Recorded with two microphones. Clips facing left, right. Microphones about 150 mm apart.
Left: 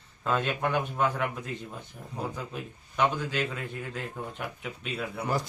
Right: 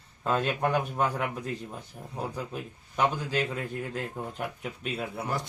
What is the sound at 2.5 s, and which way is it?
Speech, 40° right (ahead or behind).